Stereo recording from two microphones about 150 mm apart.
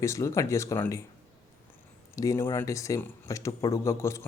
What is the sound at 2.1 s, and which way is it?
Speech, 20° left (ahead or behind).